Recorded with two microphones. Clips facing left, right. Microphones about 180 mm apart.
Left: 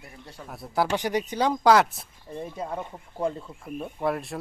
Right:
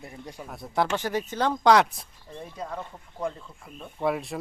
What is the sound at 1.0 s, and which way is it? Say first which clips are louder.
Speech: left 2 dB; 15° left (ahead or behind).